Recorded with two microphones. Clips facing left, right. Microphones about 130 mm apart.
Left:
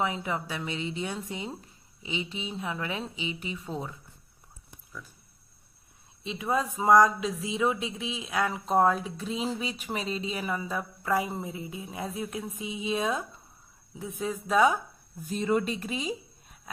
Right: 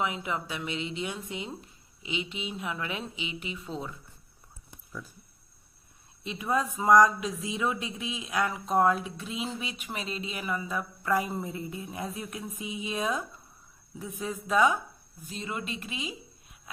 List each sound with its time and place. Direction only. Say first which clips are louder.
0.0 s speech: left 1 dB; 35° left (ahead or behind)
6.2 s speech: even; 25° left (ahead or behind)
15.3 s speech: left 9 dB; 45° left (ahead or behind)